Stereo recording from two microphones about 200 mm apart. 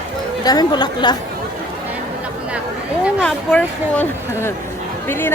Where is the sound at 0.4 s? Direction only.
20° left (ahead or behind).